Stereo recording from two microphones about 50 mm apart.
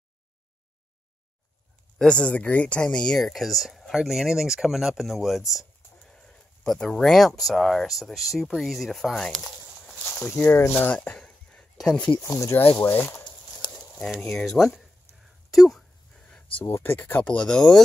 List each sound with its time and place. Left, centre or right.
2.0 s speech: centre
3.2 s speech: centre
6.0 s sheep: centre
6.8 s speech: centre
9.1 s speech: centre
10.2 s speech: left
11.0 s a sound: centre
12.2 s speech: left
12.9 s speech: left
14.3 s speech: centre
16.3 s a sound: left
16.7 s speech: left
17.2 s speech: left
17.5 s speech: centre